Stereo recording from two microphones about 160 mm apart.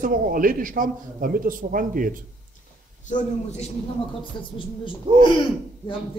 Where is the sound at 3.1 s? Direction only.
55° left (ahead or behind).